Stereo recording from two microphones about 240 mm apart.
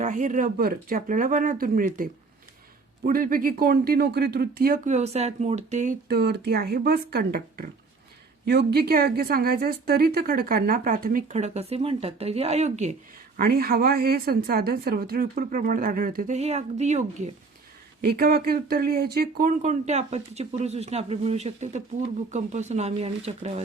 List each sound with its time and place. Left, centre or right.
0.0 s a woman's voice: right
18.0 s speech: right